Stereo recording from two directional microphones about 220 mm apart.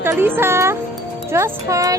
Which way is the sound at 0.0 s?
10° right (ahead or behind).